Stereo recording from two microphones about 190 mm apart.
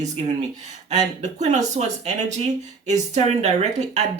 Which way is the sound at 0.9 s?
40° right (ahead or behind).